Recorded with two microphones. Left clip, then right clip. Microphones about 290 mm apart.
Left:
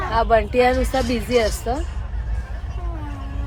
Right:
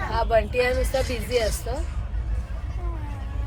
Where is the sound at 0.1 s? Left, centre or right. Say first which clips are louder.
Left 5 dB; left.